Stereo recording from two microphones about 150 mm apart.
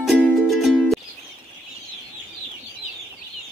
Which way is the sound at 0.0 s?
5° left (ahead or behind).